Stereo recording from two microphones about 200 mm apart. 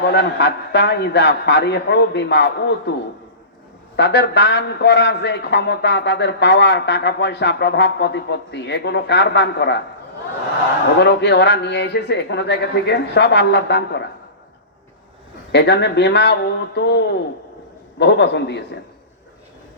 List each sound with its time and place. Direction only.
0.0 s a man's voice: 55° left (ahead or behind)
3.9 s a man's voice: 60° left (ahead or behind)
10.9 s a man's voice: 60° left (ahead or behind)
15.5 s a man's voice: 60° left (ahead or behind)